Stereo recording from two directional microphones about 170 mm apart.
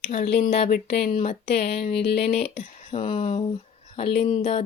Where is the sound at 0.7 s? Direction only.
70° left (ahead or behind).